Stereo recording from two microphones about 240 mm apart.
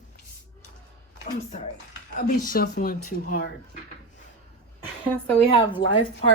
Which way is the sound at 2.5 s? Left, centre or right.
Left.